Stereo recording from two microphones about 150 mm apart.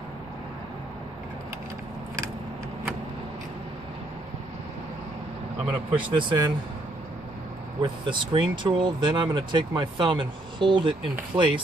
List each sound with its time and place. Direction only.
6.1 s speech: 35° right (ahead or behind)
7.8 s speech: 35° right (ahead or behind)